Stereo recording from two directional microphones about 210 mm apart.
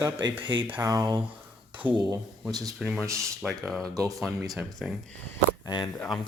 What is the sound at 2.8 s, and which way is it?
Speech, centre (ahead or behind).